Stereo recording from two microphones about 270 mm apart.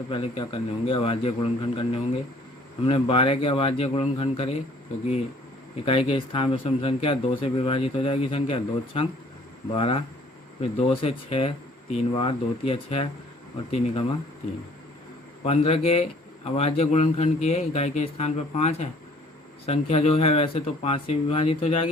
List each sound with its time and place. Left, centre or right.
0.1 s a man's voice: centre
5.8 s a man's voice: left
15.4 s a man's voice: left